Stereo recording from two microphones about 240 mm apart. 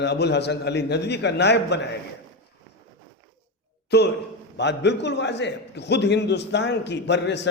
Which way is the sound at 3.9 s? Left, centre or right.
Left.